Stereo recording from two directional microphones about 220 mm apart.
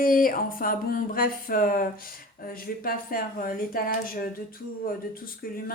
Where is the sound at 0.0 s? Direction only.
40° left (ahead or behind).